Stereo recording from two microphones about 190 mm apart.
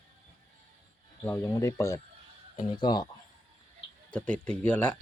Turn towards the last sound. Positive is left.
turn(degrees=10)  # may be behind; listen again after turning